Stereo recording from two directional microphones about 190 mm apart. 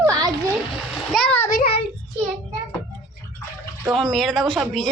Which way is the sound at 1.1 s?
5° left (ahead or behind).